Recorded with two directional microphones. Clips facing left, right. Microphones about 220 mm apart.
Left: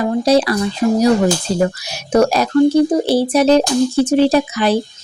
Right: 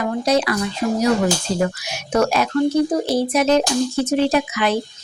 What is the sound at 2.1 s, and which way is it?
Speech, 35° left (ahead or behind).